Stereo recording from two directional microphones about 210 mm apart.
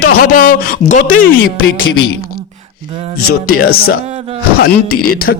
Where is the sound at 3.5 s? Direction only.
45° left (ahead or behind).